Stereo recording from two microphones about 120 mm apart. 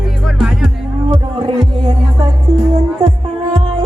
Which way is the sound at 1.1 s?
45° right (ahead or behind).